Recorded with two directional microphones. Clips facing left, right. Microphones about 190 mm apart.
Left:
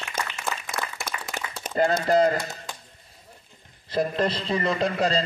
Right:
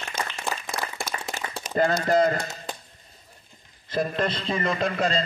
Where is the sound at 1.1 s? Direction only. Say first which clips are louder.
Right 2 dB; 40° right (ahead or behind).